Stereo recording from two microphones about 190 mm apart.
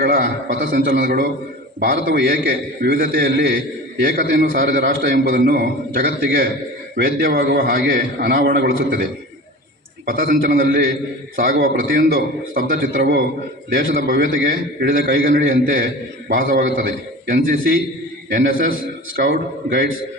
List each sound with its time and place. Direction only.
0.0 s a man's voice: 50° right (ahead or behind)
10.1 s a man's voice: 50° right (ahead or behind)